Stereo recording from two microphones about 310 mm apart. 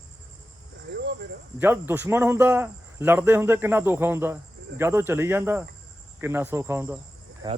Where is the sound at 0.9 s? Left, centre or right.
Right.